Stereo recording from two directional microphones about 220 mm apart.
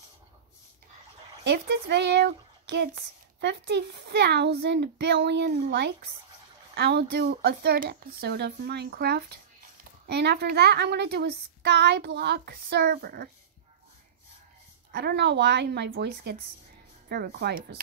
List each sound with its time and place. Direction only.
1.4 s speech: 50° right (ahead or behind)
14.9 s speech: 45° right (ahead or behind)